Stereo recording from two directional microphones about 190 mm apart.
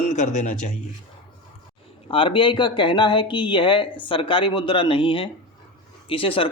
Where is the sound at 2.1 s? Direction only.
25° left (ahead or behind).